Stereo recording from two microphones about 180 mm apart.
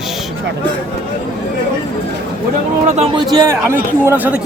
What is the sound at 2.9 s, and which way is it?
Speech, 30° right (ahead or behind).